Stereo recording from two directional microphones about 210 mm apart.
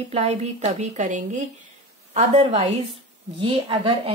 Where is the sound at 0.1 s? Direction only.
30° right (ahead or behind).